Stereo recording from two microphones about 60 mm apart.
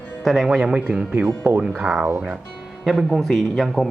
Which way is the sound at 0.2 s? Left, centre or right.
Centre.